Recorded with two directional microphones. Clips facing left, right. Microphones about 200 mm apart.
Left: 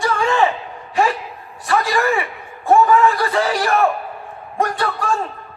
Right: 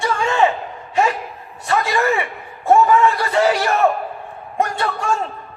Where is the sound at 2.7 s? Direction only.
25° right (ahead or behind).